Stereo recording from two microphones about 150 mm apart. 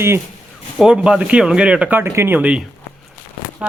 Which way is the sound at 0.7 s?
5° right (ahead or behind).